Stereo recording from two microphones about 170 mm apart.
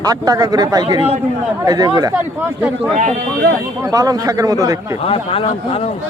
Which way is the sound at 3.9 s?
20° right (ahead or behind).